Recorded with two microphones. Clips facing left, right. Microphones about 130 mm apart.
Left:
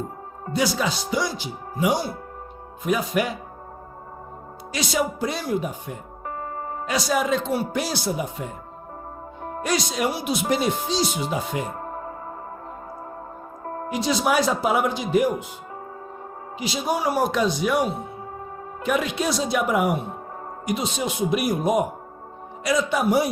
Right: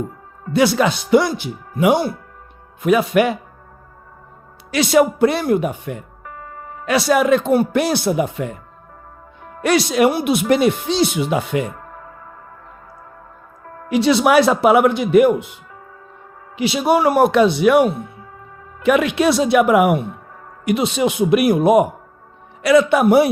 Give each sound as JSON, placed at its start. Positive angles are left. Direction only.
{"t": 0.5, "sound": "speech", "side_deg": -65}
{"t": 2.8, "sound": "a man's voice", "side_deg": -70}
{"t": 4.7, "sound": "speech", "side_deg": -65}
{"t": 6.2, "sound": "music", "side_deg": 35}
{"t": 6.8, "sound": "speech", "side_deg": -65}
{"t": 9.6, "sound": "speech", "side_deg": -70}
{"t": 11.7, "sound": "music", "side_deg": 35}
{"t": 13.7, "sound": "music", "side_deg": 35}
{"t": 13.9, "sound": "a man's voice", "side_deg": -70}
{"t": 16.6, "sound": "a man's voice", "side_deg": -70}